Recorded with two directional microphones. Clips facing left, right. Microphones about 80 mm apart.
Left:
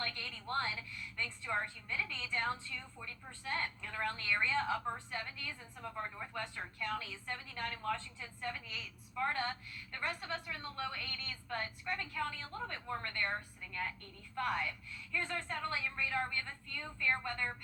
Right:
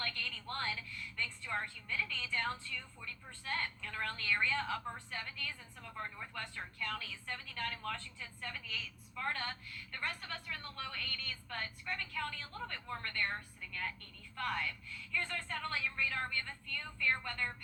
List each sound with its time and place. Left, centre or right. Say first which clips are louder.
0.0 s a sound: even; centre
1.1 s a woman's voice: left 2 dB; centre
14.3 s a woman's voice: left 2 dB; centre